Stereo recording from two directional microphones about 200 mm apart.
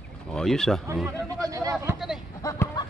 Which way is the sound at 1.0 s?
15° right (ahead or behind).